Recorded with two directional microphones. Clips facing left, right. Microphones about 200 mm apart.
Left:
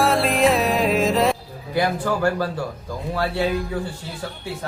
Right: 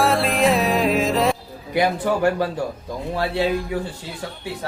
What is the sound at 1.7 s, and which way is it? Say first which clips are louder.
Speech: right 2 dB; 20° right (ahead or behind).